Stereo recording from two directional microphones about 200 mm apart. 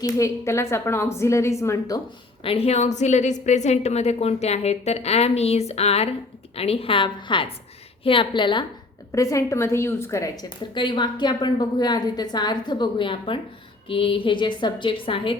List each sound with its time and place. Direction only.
0.0 s a woman's voice: 15° left (ahead or behind)
2.4 s a woman's voice: 30° left (ahead or behind)